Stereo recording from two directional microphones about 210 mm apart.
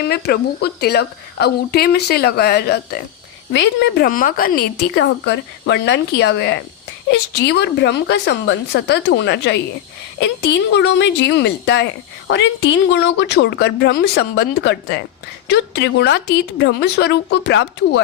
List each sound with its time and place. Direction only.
0.1 s a woman's voice: 50° left (ahead or behind)